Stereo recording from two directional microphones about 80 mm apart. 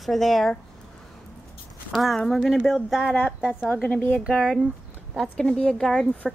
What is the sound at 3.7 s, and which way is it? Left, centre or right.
Speech, centre.